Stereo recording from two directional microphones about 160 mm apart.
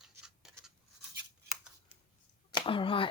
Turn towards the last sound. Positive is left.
turn(degrees=30)  # may be behind; listen again after turning